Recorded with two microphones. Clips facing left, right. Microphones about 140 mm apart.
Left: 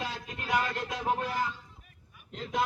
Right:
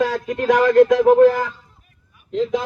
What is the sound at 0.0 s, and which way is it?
A man's voice, 90° right.